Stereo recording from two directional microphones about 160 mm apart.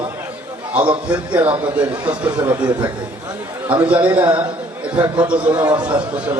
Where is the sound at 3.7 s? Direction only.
10° right (ahead or behind).